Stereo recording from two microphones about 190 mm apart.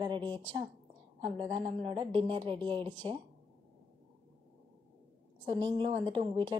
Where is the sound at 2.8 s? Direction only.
10° left (ahead or behind).